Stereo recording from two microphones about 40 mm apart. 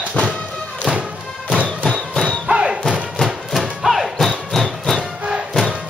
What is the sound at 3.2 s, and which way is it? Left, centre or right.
Music, centre.